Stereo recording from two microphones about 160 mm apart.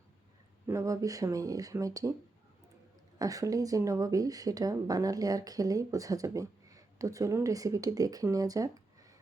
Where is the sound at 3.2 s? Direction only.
20° right (ahead or behind).